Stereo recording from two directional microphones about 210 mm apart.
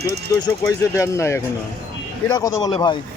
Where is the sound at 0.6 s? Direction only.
15° left (ahead or behind).